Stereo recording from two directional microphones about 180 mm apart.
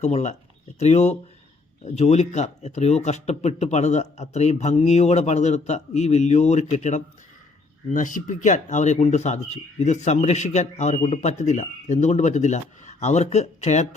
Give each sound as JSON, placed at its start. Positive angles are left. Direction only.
{"t": 0.0, "sound": "speech", "side_deg": 40}